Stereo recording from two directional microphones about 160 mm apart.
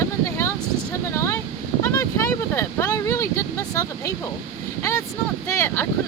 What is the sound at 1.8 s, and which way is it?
Vehicle, 15° left (ahead or behind).